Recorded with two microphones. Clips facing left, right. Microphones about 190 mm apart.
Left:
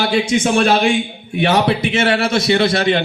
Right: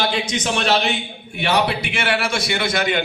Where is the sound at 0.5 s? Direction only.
35° left (ahead or behind).